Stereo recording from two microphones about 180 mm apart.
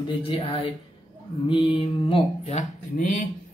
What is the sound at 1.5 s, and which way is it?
Speech, 30° left (ahead or behind).